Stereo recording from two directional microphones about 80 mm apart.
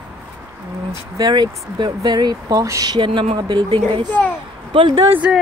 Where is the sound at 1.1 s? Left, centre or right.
Right.